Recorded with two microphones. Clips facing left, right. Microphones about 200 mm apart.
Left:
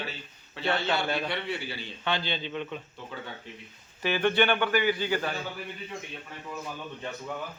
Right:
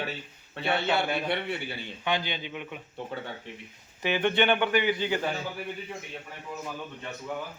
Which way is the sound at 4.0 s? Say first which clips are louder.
Even; 15° right (ahead or behind).